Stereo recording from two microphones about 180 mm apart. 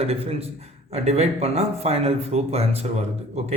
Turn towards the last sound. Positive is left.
turn(degrees=-35)  # may be behind; listen again after turning